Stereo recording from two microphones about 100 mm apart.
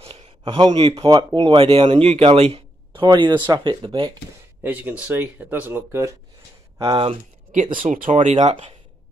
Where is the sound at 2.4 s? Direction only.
90° right.